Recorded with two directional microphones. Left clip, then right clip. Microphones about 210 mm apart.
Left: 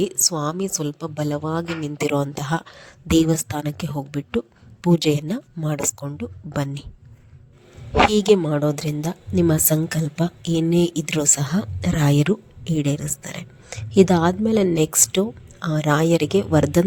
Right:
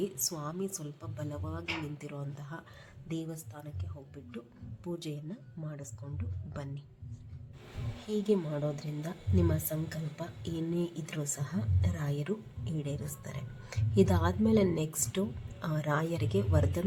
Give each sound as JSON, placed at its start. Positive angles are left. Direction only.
{"t": 0.0, "sound": "a woman's voice", "side_deg": 40}
{"t": 8.1, "sound": "a woman's voice", "side_deg": 45}